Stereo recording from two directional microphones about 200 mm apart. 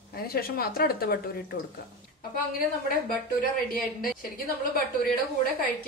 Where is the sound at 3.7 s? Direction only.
45° left (ahead or behind).